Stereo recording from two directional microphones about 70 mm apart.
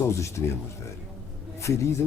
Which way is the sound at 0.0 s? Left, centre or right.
Left.